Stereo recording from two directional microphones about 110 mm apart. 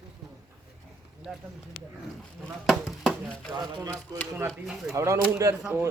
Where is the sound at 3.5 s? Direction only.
35° right (ahead or behind).